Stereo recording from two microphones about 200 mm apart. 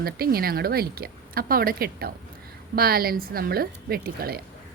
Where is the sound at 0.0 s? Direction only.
50° right (ahead or behind).